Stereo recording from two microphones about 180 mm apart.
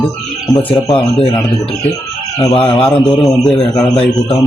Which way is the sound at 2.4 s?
30° left (ahead or behind).